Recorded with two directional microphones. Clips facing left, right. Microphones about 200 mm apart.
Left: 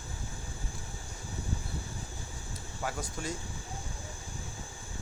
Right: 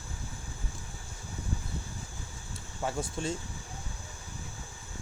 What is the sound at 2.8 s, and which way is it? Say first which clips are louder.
Speech: right 4 dB; 25° right (ahead or behind).